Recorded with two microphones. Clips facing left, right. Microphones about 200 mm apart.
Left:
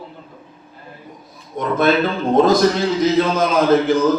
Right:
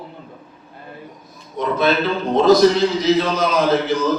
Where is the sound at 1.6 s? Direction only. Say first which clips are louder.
Left 2 dB; 50° left (ahead or behind).